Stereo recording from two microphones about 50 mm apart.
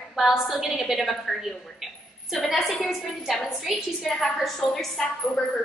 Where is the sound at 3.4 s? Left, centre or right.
Centre.